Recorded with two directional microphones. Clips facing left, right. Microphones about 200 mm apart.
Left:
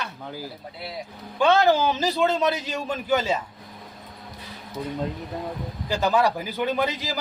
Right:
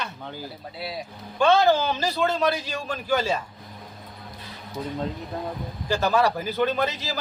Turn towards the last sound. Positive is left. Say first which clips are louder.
# left 1 dB
turn(degrees=15)  # may be behind; listen again after turning